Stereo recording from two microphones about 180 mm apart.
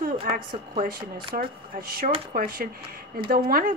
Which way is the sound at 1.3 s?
55° right (ahead or behind).